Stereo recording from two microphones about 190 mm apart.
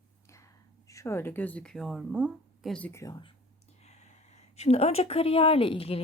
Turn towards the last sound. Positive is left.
turn(degrees=30)  # may be behind; listen again after turning